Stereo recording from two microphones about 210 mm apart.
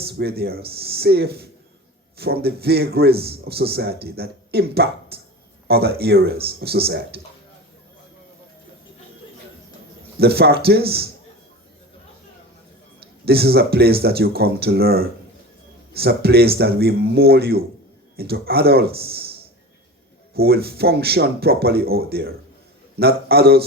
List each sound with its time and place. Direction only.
0.0 s a man's voice: 50° right (ahead or behind)
10.2 s a man's voice: 50° right (ahead or behind)
13.2 s a man's voice: 50° right (ahead or behind)
20.3 s a man's voice: 50° right (ahead or behind)